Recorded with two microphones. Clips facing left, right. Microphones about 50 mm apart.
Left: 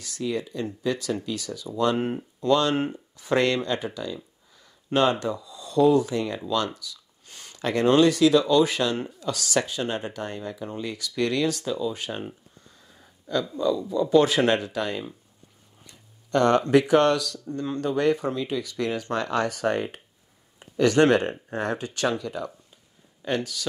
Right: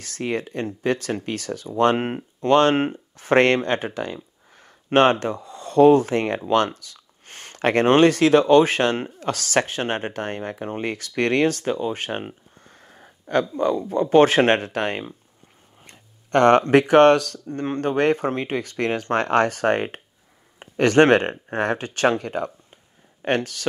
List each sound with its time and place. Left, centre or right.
0.0 s speech: right